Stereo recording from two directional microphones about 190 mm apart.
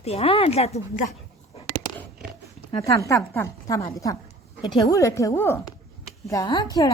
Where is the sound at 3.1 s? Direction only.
15° left (ahead or behind).